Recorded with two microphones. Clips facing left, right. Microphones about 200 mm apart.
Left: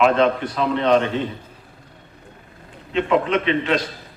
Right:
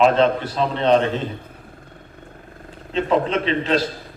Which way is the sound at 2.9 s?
35° right (ahead or behind).